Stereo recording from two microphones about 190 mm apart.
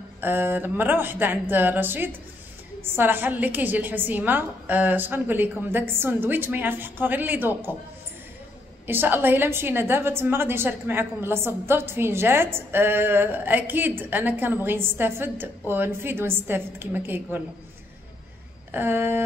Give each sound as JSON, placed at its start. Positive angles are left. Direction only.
{"t": 0.2, "sound": "a woman's voice", "side_deg": -10}
{"t": 8.8, "sound": "a woman's voice", "side_deg": -10}
{"t": 18.7, "sound": "a woman's voice", "side_deg": -10}